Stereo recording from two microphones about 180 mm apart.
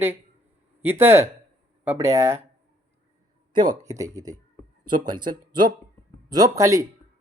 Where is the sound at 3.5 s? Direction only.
25° right (ahead or behind).